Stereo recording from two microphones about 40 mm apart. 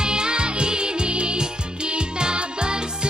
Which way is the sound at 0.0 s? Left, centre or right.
Right.